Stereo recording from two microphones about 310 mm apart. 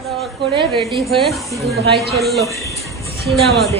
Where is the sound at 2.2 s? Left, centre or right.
Centre.